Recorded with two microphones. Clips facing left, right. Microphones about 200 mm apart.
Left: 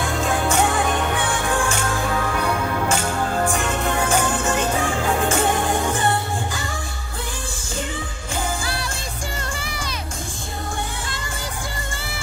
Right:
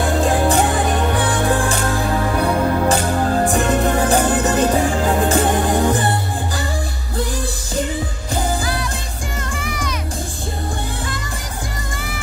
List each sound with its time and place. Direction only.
0.0 s music: 35° right (ahead or behind)
9.6 s music: 30° left (ahead or behind)